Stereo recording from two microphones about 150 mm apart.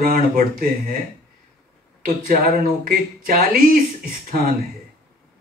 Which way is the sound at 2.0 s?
65° right (ahead or behind).